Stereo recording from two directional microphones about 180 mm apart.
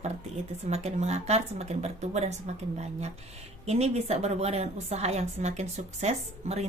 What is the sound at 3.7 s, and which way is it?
A woman's voice, 35° right (ahead or behind).